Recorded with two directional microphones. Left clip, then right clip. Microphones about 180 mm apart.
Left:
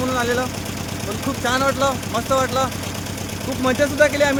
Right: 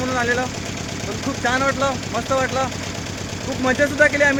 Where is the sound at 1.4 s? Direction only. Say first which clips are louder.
Even; 10° left (ahead or behind).